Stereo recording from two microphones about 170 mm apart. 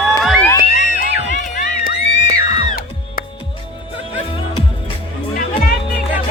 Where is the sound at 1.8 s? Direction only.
70° left (ahead or behind).